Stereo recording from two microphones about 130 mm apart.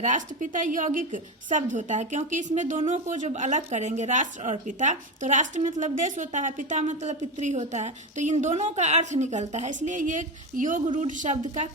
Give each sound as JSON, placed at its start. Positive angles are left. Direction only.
{"t": 0.0, "sound": "a woman's voice", "side_deg": -70}